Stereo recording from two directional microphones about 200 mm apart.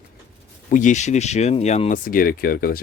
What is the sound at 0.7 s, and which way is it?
Speech, 35° left (ahead or behind).